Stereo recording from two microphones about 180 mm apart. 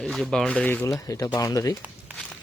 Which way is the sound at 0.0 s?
5° left (ahead or behind).